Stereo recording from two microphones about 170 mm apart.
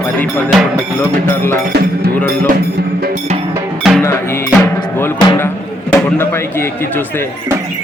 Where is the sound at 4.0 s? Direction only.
15° left (ahead or behind).